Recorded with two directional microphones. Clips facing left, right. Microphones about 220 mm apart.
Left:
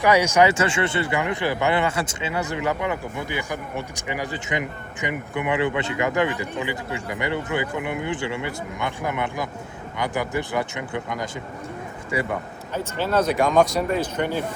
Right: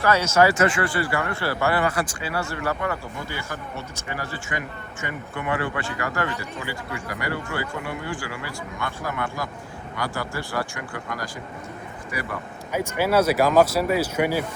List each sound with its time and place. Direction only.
0.0 s speech: 15° left (ahead or behind)
0.5 s speech: 30° left (ahead or behind)
12.7 s speech: 10° right (ahead or behind)